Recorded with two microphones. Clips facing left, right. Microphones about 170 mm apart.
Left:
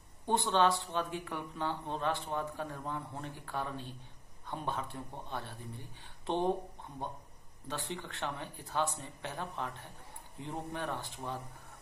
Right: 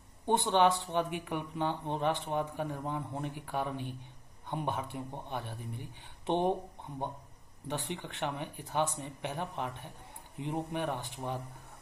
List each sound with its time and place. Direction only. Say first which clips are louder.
0.3 s speech: right 2 dB; 20° right (ahead or behind)
7.6 s speech: right 3 dB; 20° right (ahead or behind)